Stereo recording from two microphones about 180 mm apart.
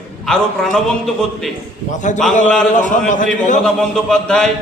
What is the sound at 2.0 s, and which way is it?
Speech, 40° left (ahead or behind).